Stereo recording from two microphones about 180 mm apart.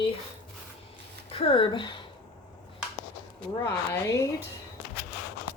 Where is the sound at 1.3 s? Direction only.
30° left (ahead or behind).